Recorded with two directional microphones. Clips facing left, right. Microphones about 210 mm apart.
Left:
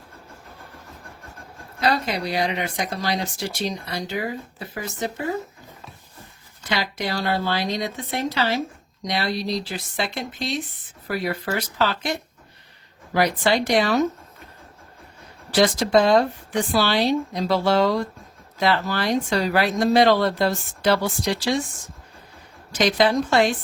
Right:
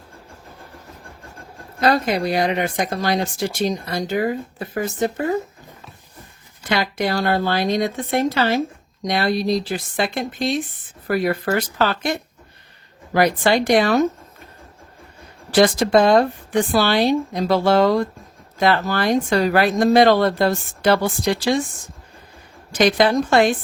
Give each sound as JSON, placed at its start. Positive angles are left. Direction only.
{"t": 1.8, "sound": "speech", "side_deg": -50}
{"t": 6.7, "sound": "speech", "side_deg": -55}
{"t": 13.1, "sound": "speech", "side_deg": -50}
{"t": 15.5, "sound": "speech", "side_deg": -55}
{"t": 22.7, "sound": "speech", "side_deg": -50}